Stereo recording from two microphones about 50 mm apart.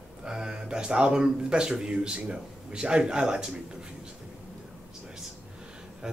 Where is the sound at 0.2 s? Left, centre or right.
Centre.